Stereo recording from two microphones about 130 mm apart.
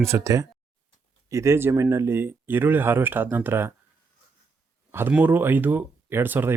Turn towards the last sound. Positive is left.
turn(degrees=-15)  # may be behind; listen again after turning